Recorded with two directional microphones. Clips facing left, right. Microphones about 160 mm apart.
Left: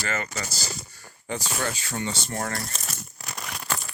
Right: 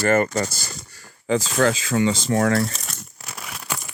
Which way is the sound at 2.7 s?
5° right (ahead or behind).